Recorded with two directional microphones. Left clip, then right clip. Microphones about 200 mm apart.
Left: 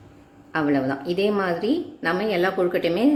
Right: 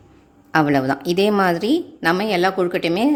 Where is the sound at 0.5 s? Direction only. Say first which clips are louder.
Right 5 dB; 50° right (ahead or behind).